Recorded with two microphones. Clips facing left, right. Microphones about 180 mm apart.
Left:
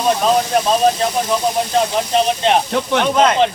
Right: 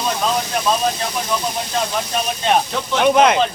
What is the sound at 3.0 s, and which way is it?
Speech, 10° right (ahead or behind).